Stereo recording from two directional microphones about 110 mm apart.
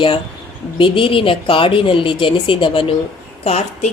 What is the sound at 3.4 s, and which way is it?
Speech, 85° left.